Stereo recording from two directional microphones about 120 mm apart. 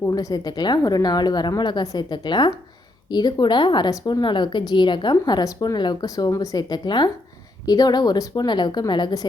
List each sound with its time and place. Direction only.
0.0 s a woman's voice: 30° left (ahead or behind)